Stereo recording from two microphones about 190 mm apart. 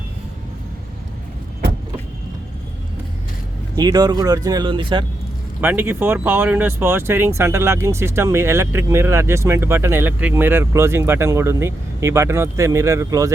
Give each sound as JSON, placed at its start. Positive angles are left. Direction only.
{"t": 3.8, "sound": "speech", "side_deg": -20}
{"t": 5.5, "sound": "speech", "side_deg": -10}